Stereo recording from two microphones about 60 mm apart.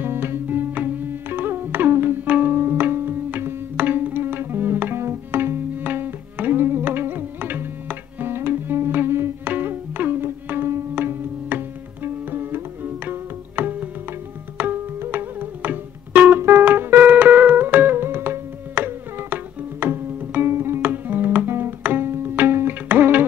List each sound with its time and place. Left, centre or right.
0.0 s music: right
2.2 s music: right
2.5 s music: right
16.3 s music: right
20.8 s music: right